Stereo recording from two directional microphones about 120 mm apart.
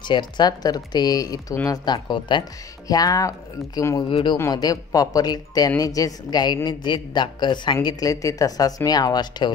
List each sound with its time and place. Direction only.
0.1 s a man's voice: 35° left (ahead or behind)
2.9 s speech: 30° left (ahead or behind)
4.1 s a man's voice: 40° left (ahead or behind)